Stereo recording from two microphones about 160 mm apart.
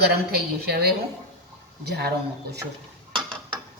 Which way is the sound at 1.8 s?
90° right.